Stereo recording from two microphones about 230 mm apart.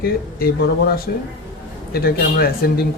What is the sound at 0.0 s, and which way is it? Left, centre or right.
Speech, left.